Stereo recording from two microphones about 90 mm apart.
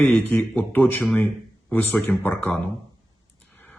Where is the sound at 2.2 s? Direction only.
20° left (ahead or behind).